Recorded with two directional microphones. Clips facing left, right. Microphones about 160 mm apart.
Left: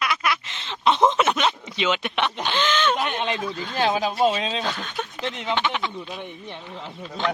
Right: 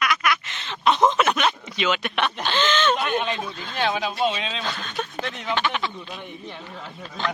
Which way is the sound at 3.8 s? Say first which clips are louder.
Left 3 dB; 40° left (ahead or behind).